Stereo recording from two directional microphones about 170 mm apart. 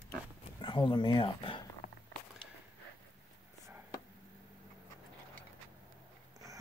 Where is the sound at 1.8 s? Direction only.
50° left (ahead or behind).